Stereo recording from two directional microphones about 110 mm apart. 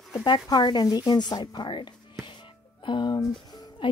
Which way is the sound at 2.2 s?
50° left (ahead or behind).